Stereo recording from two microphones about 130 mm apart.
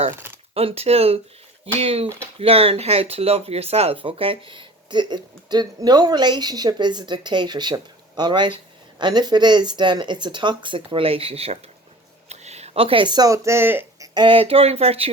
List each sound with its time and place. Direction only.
0.1 s speech: 20° right (ahead or behind)
0.5 s speech: 50° right (ahead or behind); by 14.1 s 15° right (ahead or behind)
14.1 s speech: 35° right (ahead or behind)